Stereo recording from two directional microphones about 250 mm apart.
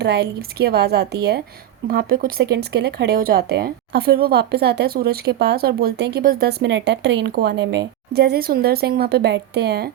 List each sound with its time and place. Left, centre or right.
0.0 s speech: right